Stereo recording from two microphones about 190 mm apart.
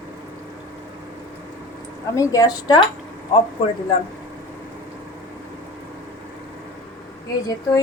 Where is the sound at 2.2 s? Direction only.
20° left (ahead or behind).